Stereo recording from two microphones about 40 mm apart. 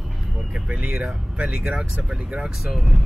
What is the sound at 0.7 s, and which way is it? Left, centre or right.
Speech, right.